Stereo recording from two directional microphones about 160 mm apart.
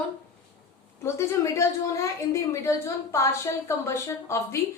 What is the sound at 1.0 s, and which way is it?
A woman's voice, 15° left (ahead or behind).